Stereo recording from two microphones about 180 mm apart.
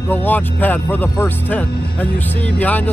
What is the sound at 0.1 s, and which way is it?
Speech, 10° left (ahead or behind).